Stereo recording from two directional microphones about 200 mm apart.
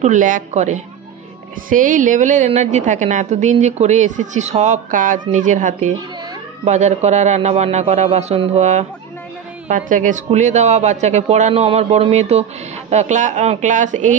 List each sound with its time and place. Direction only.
0.0 s a woman's voice: 40° right (ahead or behind)